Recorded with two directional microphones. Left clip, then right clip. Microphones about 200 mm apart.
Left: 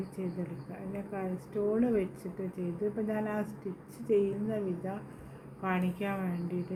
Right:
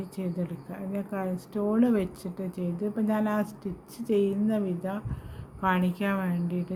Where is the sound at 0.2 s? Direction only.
65° right (ahead or behind).